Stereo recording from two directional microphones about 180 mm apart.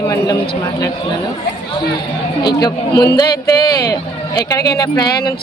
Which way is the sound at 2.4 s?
20° left (ahead or behind).